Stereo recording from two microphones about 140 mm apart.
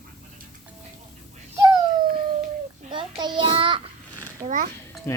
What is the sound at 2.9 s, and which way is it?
Child singing, 35° right (ahead or behind).